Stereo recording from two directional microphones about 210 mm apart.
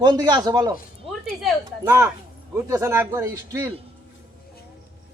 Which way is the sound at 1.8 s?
10° right (ahead or behind).